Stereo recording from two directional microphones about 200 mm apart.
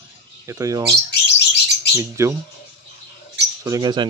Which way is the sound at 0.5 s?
15° right (ahead or behind).